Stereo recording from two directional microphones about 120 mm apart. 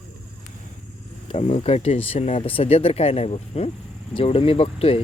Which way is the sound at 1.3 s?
65° left (ahead or behind).